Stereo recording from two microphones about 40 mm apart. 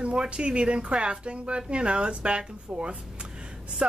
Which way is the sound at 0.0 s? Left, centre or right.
Right.